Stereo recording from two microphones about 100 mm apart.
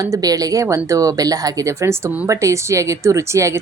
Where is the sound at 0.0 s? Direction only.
35° right (ahead or behind).